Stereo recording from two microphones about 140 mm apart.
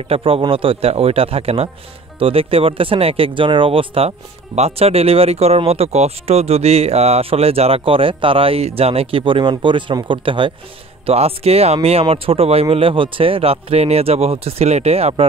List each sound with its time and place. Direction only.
0.1 s speech: 40° right (ahead or behind)